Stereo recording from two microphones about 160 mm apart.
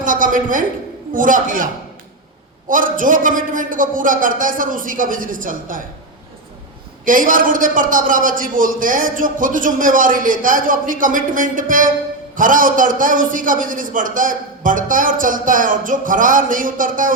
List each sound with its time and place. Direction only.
0.0 s a sound: 55° right (ahead or behind)
1.1 s a man's voice: 55° right (ahead or behind)
7.0 s a man's voice: 55° right (ahead or behind)